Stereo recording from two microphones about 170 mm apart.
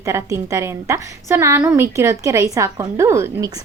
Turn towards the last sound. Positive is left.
turn(degrees=-15)  # may be behind; listen again after turning